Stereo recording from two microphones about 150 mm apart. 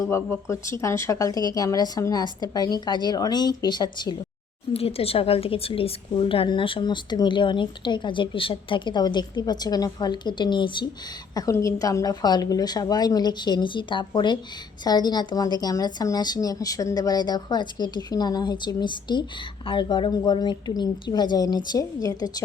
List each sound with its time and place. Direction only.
0.0 s a woman's voice: 20° left (ahead or behind)
4.7 s a woman's voice: 40° left (ahead or behind); by 22.4 s 25° left (ahead or behind)